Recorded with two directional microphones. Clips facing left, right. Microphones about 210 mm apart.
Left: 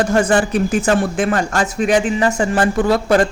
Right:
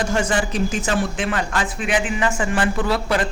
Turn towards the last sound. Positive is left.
turn(degrees=45)  # may be behind; listen again after turning